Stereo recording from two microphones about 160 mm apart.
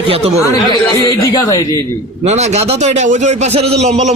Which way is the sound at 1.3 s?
20° left (ahead or behind).